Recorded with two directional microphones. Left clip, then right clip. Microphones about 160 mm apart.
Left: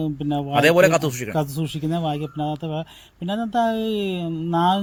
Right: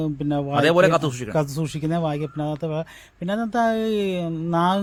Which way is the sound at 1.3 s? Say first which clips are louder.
Right 1 dB; 30° right (ahead or behind).